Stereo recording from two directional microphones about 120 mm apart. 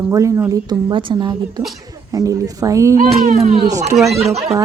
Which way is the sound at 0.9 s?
45° right (ahead or behind).